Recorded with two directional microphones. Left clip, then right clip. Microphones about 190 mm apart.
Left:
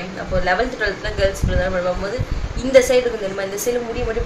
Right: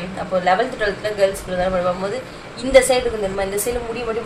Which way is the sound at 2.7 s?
Centre (ahead or behind).